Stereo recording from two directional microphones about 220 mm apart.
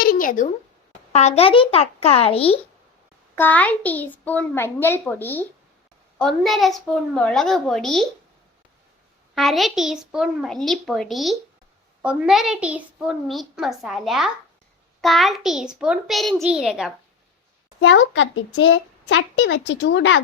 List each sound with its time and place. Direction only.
0.0 s a sound: 40° left (ahead or behind)
1.1 s speech: 30° left (ahead or behind)
3.3 s a child's voice: 10° left (ahead or behind)
9.3 s a woman's voice: centre (ahead or behind)
17.8 s speech: 60° left (ahead or behind)